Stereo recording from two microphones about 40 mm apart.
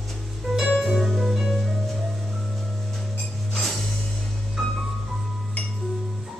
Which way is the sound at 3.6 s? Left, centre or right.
Centre.